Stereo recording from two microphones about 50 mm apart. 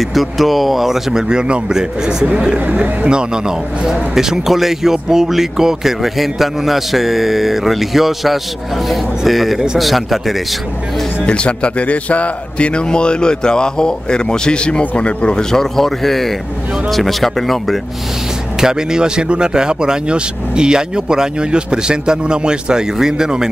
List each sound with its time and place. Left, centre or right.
0.0 s speech: centre
11.2 s a man's voice: left; by 17.7 s centre
18.6 s speech: centre